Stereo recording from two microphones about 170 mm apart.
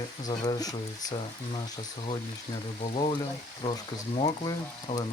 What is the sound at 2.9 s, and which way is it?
Speech, 30° left (ahead or behind).